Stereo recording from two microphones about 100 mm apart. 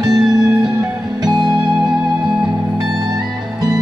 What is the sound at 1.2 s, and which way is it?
Music, 50° right (ahead or behind).